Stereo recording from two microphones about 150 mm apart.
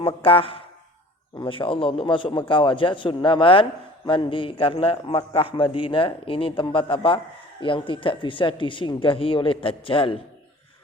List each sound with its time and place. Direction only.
0.0 s a man's voice: 35° left (ahead or behind)